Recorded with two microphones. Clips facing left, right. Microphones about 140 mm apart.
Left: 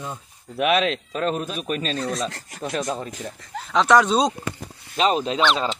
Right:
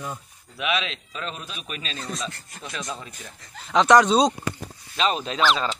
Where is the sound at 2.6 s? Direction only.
50° left (ahead or behind).